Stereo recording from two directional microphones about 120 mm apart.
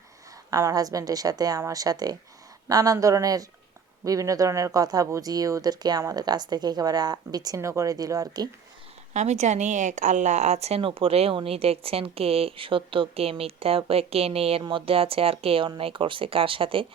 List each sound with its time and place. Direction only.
0.5 s speech: 30° right (ahead or behind)
9.1 s speech: 70° right (ahead or behind); by 14.6 s 55° right (ahead or behind)
14.6 s speech: 45° right (ahead or behind)